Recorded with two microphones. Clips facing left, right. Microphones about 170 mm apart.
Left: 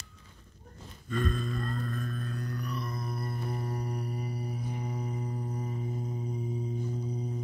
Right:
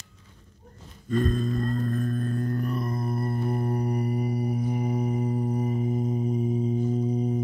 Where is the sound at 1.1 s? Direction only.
40° right (ahead or behind).